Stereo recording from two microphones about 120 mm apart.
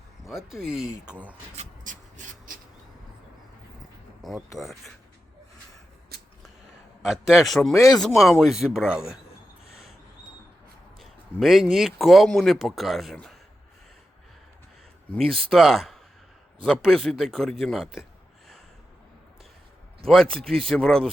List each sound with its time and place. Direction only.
0.3 s speech: 5° right (ahead or behind)
1.5 s a sound: 90° right
4.2 s a sound: centre (ahead or behind)
4.5 s speech: centre (ahead or behind)
7.0 s speech: 5° right (ahead or behind)
11.0 s speech: centre (ahead or behind)
15.2 s speech: centre (ahead or behind)
20.3 s speech: 5° left (ahead or behind)